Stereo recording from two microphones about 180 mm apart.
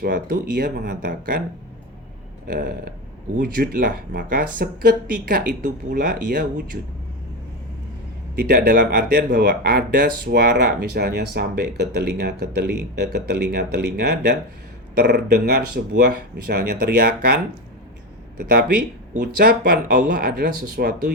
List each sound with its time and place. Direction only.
0.0 s speech: 65° right (ahead or behind)
2.6 s speech: 55° right (ahead or behind)
8.4 s speech: 60° right (ahead or behind)
19.2 s speech: 60° right (ahead or behind)